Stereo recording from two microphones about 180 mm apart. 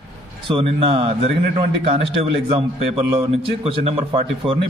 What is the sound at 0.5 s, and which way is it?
A man's voice, 30° right (ahead or behind).